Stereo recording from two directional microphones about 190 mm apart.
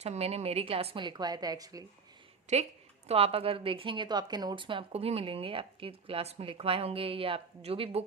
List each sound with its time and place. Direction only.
0.0 s a woman's voice: 35° right (ahead or behind); by 1.8 s 20° right (ahead or behind)
2.5 s a woman's voice: 35° right (ahead or behind)